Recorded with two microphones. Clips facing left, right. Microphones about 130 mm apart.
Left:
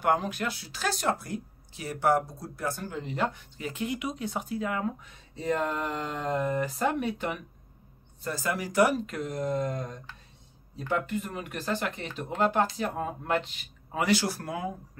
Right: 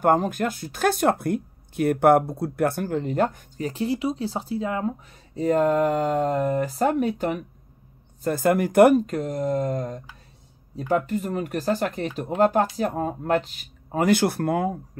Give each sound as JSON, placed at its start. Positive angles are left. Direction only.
{"t": 0.0, "sound": "speech", "side_deg": -45}
{"t": 5.3, "sound": "speech", "side_deg": -45}
{"t": 8.2, "sound": "speech", "side_deg": -55}
{"t": 9.0, "sound": "speech", "side_deg": -40}
{"t": 11.1, "sound": "speech", "side_deg": -40}